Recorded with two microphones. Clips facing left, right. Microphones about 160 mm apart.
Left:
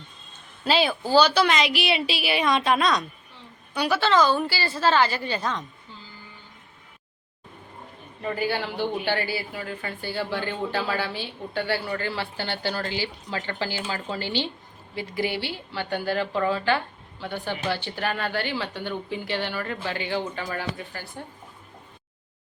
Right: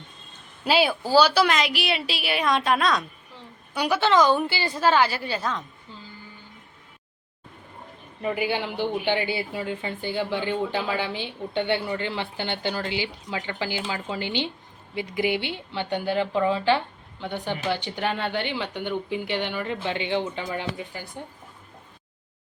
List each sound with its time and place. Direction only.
0.6 s a woman's voice: 10° right (ahead or behind)
3.8 s speech: 15° right (ahead or behind)
8.2 s speech: 15° right (ahead or behind)